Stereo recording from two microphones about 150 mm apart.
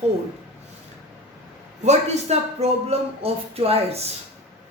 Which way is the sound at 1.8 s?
50° right (ahead or behind).